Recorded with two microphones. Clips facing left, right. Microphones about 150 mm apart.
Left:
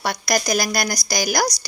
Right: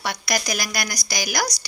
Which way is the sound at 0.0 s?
40° left (ahead or behind).